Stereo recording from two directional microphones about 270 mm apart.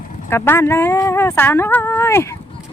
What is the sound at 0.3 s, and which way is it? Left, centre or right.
Speech, centre.